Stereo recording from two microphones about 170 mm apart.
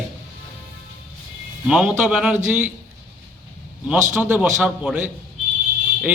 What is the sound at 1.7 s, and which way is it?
A man's voice, 5° right (ahead or behind).